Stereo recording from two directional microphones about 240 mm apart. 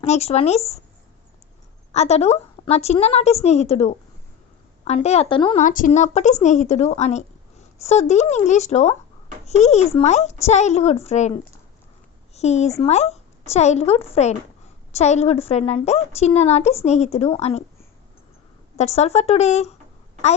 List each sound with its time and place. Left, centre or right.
0.0 s a woman's voice: left
1.9 s a woman's voice: left
18.8 s a woman's voice: left